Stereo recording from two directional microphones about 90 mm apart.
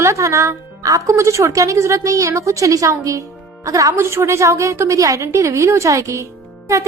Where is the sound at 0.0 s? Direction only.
35° right (ahead or behind).